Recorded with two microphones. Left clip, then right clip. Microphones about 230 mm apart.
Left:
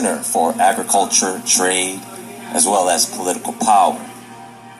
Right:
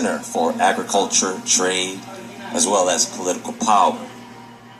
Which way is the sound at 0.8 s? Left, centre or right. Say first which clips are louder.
Left 3 dB; left.